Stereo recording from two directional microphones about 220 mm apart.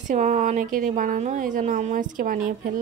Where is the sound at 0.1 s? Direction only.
35° right (ahead or behind).